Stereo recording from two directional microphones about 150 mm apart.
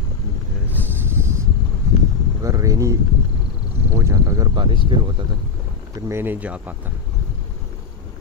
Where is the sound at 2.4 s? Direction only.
20° right (ahead or behind).